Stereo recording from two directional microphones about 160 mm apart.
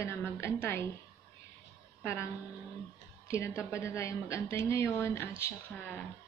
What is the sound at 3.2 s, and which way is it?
A woman's voice, 15° left (ahead or behind).